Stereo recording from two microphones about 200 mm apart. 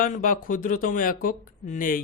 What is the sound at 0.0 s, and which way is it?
Speech, 45° left (ahead or behind).